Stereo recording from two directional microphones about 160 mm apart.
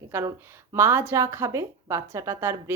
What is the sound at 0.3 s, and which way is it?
Speech, 15° right (ahead or behind).